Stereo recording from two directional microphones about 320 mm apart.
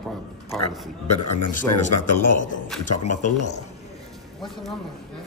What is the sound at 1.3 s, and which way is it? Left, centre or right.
Speech, left.